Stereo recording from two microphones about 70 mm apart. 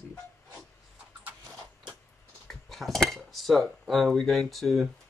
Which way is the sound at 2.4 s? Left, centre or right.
Centre.